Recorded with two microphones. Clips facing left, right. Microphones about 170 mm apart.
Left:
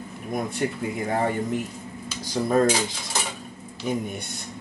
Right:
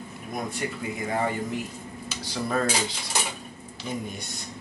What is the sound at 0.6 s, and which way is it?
Speech, 50° left (ahead or behind).